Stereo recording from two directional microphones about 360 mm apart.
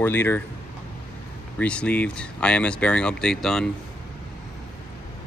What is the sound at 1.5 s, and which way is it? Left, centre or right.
Speech, centre.